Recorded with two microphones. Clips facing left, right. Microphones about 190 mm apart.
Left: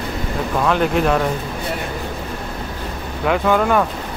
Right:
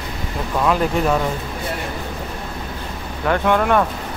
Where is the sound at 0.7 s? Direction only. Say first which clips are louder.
Left 1 dB; centre (ahead or behind).